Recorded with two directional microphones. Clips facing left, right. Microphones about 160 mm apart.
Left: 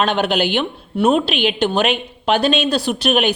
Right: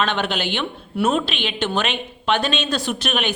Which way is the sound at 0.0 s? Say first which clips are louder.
Left 5 dB; 40° left (ahead or behind).